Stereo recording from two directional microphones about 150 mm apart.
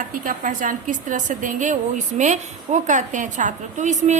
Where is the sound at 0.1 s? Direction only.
65° right (ahead or behind).